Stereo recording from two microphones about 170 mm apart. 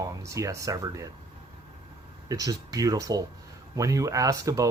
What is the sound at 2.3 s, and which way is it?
Speech, 20° right (ahead or behind).